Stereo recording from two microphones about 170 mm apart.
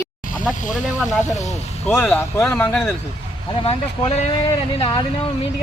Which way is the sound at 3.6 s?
35° left (ahead or behind).